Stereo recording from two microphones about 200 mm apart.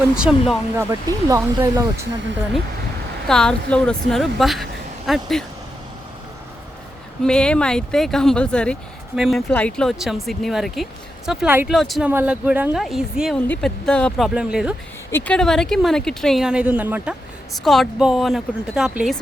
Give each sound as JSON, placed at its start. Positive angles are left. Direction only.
{"t": 0.2, "sound": "speech", "side_deg": 0}
{"t": 0.8, "sound": "speech", "side_deg": -15}
{"t": 3.2, "sound": "speech", "side_deg": 5}
{"t": 7.2, "sound": "speech", "side_deg": 5}
{"t": 15.1, "sound": "speech", "side_deg": 5}